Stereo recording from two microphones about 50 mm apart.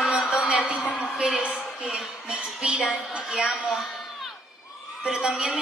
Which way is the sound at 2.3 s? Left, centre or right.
Right.